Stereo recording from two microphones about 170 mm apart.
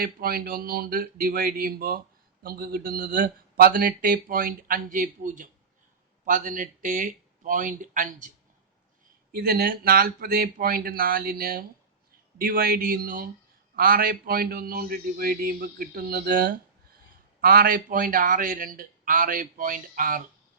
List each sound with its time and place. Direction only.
0.0 s a man's voice: 60° right (ahead or behind)
9.3 s a man's voice: 65° right (ahead or behind)